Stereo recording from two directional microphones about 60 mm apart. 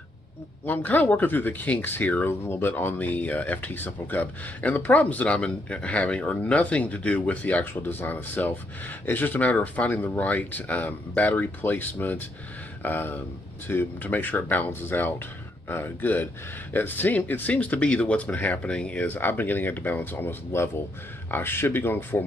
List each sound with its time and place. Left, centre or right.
0.7 s speech: left
2.2 s speech: left